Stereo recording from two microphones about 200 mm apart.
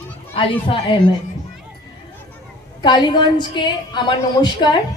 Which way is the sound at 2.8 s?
25° left (ahead or behind).